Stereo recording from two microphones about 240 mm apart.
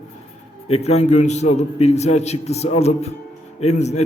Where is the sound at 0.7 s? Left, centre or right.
Left.